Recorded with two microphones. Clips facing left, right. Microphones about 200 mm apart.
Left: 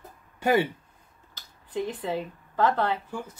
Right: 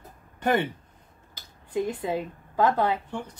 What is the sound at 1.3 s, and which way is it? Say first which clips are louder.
A woman's voice: right 3 dB; 10° right (ahead or behind).